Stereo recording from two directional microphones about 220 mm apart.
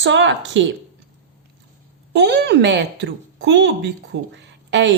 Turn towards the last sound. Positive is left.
turn(degrees=-55)  # may be behind; listen again after turning